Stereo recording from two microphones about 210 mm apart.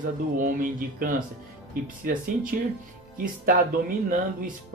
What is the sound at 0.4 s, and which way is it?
Speech, 40° right (ahead or behind).